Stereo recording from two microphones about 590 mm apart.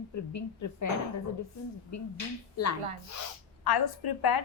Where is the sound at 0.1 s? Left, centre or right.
Left.